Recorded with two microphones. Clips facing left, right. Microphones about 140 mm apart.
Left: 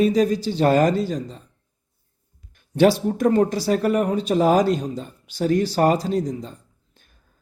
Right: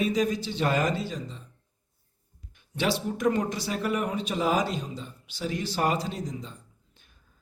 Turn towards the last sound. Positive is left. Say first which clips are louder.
# even
turn(degrees=45)  # may be behind; listen again after turning